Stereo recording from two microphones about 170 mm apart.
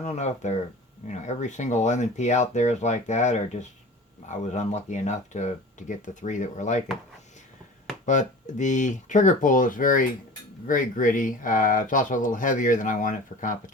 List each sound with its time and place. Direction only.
0.0 s speech: 45° left (ahead or behind)
8.0 s speech: 45° left (ahead or behind)